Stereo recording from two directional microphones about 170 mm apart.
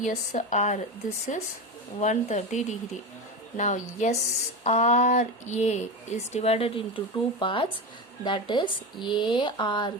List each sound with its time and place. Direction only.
0.0 s speech: 45° left (ahead or behind)
2.0 s speech: 45° left (ahead or behind); by 9.9 s 25° left (ahead or behind)